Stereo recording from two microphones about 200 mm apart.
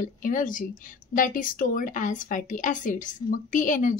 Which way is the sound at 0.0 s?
40° left (ahead or behind).